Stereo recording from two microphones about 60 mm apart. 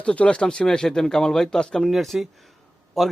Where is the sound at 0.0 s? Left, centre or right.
Centre.